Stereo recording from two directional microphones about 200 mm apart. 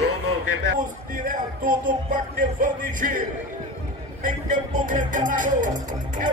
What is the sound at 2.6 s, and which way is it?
Music, 40° right (ahead or behind).